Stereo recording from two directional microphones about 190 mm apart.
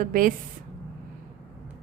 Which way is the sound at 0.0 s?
45° right (ahead or behind).